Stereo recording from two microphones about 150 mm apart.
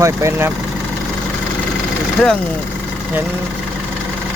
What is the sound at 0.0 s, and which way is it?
Speech, 20° right (ahead or behind).